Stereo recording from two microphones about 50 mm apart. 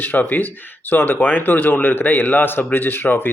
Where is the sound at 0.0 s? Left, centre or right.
Left.